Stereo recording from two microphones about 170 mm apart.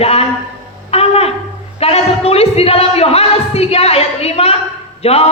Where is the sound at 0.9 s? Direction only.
35° left (ahead or behind).